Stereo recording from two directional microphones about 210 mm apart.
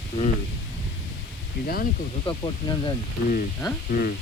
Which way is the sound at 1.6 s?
45° left (ahead or behind).